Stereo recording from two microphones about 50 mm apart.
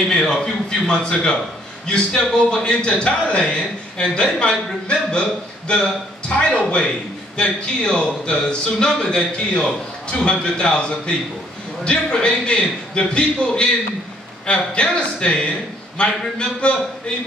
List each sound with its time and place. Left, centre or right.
0.1 s a man's voice: centre